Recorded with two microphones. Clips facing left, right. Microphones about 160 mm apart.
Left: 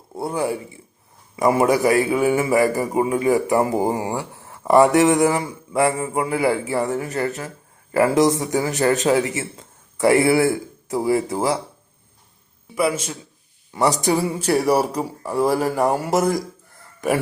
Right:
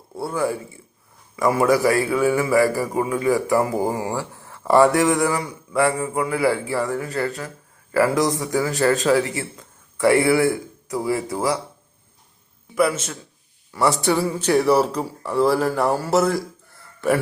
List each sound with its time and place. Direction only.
0.2 s a man's voice: 20° left (ahead or behind)
13.7 s a man's voice: 20° left (ahead or behind)